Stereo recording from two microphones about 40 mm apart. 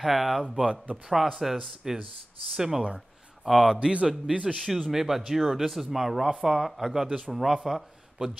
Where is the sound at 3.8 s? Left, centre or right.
Right.